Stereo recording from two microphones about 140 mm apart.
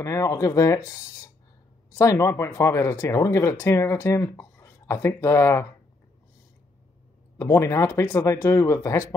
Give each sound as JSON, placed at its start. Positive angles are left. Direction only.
{"t": 0.0, "sound": "speech", "side_deg": 25}
{"t": 7.3, "sound": "speech", "side_deg": 20}